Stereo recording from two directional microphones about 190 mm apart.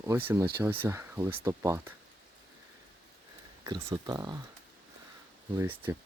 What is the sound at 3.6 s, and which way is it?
Speech, 20° right (ahead or behind).